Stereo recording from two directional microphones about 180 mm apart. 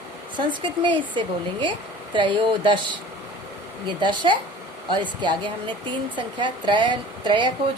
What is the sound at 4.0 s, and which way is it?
A woman's voice, 25° right (ahead or behind).